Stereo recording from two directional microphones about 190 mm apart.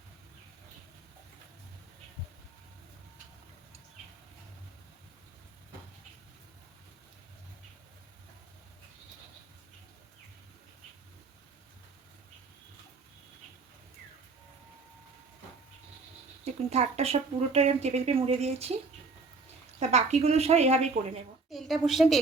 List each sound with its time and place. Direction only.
16.4 s speech: 35° right (ahead or behind)
19.9 s speech: 35° right (ahead or behind)
21.5 s a woman's voice: centre (ahead or behind)